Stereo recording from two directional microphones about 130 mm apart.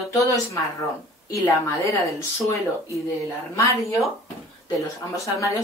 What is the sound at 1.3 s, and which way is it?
Speech, 25° left (ahead or behind).